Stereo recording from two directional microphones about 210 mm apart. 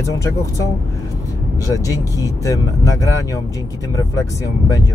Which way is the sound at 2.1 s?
15° left (ahead or behind).